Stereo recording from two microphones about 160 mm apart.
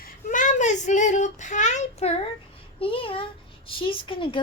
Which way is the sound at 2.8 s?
35° left (ahead or behind).